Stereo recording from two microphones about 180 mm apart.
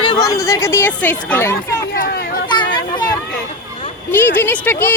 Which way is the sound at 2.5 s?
25° left (ahead or behind).